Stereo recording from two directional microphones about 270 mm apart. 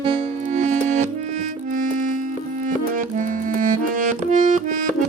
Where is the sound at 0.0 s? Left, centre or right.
Centre.